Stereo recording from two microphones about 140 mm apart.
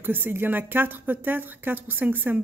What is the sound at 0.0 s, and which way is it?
Speech, 15° right (ahead or behind).